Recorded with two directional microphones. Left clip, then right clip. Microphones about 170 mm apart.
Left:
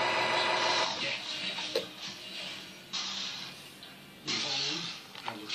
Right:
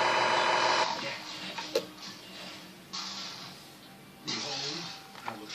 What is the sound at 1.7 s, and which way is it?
Music, 55° right (ahead or behind).